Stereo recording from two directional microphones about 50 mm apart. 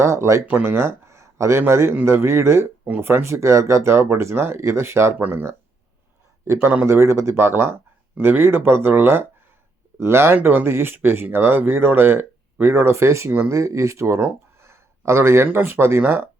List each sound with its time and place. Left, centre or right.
0.0 s speech: right
0.5 s speech: right
3.0 s speech: right
3.2 s speech: right
5.3 s speech: right
6.8 s speech: right
10.0 s speech: right
10.4 s speech: right
13.5 s speech: right
14.6 s a sound: right
15.4 s speech: right